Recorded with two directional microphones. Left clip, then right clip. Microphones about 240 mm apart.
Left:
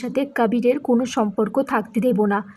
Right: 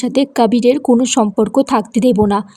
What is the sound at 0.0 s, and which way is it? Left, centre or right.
Speech, right.